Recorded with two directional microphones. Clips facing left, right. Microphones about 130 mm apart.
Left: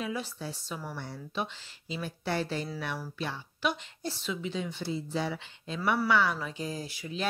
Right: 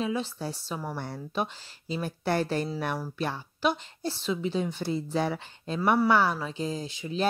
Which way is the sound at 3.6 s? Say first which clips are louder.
Right 4 dB; 30° right (ahead or behind).